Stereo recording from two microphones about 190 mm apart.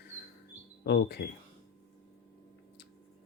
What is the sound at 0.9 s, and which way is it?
Speech, 60° left (ahead or behind).